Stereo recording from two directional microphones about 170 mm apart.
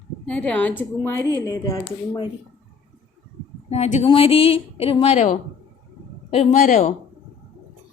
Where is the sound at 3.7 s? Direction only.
40° left (ahead or behind).